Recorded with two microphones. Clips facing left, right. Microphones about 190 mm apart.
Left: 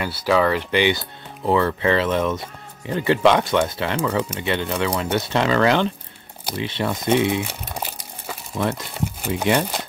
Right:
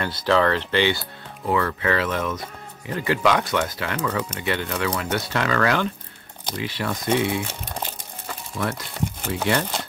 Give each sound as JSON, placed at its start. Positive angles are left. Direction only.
{"t": 0.0, "sound": "speech", "side_deg": 10}
{"t": 1.4, "sound": "speech", "side_deg": 25}
{"t": 7.4, "sound": "crumpling", "side_deg": 10}
{"t": 9.3, "sound": "speech", "side_deg": 15}